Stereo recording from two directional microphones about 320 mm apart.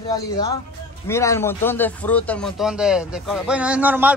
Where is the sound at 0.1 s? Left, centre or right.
Centre.